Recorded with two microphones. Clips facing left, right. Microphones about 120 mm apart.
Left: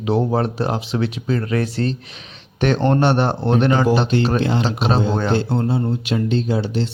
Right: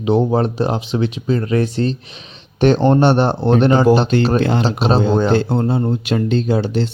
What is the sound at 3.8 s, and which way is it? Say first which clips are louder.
Speech: right 4 dB; 45° right (ahead or behind).